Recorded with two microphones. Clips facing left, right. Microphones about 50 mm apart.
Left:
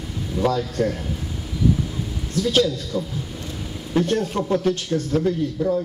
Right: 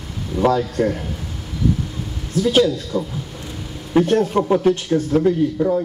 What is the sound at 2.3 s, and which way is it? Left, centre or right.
Speech, centre.